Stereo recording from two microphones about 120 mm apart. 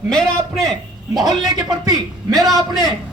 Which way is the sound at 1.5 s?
35° right (ahead or behind).